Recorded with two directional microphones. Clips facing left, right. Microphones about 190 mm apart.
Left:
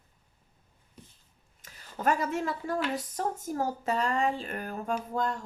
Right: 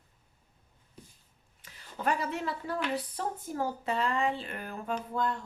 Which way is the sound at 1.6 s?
45° left (ahead or behind).